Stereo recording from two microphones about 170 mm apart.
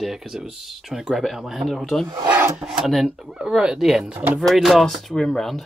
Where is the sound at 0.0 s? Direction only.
Centre (ahead or behind).